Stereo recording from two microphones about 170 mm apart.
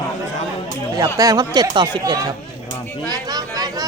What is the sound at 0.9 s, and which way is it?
Speech, 20° right (ahead or behind).